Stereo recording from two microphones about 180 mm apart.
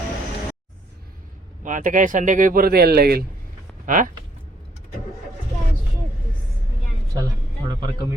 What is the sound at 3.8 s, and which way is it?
Speech, 45° right (ahead or behind).